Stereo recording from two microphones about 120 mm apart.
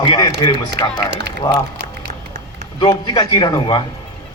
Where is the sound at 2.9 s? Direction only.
40° left (ahead or behind).